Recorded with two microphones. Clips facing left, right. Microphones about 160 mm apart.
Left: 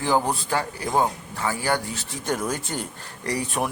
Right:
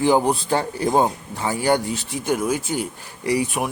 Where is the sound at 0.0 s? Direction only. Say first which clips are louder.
Right 5 dB; 20° right (ahead or behind).